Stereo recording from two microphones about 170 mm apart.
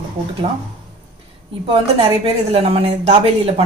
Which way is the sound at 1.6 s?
35° right (ahead or behind).